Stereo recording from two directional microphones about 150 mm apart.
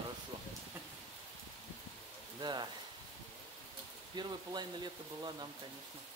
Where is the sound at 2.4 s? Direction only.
30° right (ahead or behind).